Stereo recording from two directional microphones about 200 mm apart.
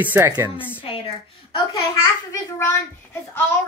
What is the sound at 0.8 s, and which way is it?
Speech, 30° left (ahead or behind).